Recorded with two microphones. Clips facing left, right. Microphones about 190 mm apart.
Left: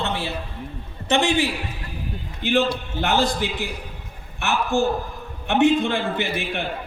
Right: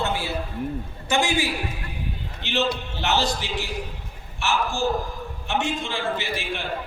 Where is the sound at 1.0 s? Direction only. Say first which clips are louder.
Left 3 dB; 35° left (ahead or behind).